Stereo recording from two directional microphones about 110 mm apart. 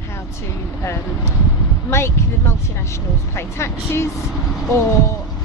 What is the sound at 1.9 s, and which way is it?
Speech, 25° left (ahead or behind).